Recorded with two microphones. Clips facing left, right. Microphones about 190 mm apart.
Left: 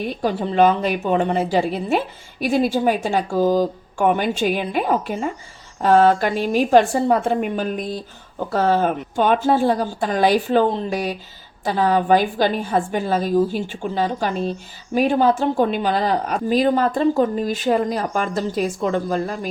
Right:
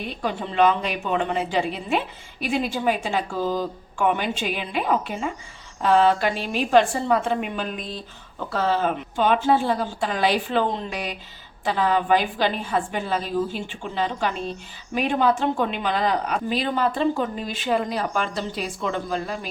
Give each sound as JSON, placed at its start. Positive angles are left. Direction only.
{"t": 0.0, "sound": "a woman's voice", "side_deg": 40}